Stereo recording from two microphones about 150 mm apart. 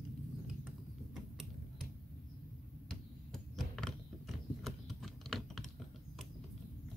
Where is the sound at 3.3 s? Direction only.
Centre (ahead or behind).